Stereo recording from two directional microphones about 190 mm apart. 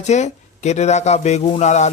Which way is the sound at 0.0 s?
35° left (ahead or behind).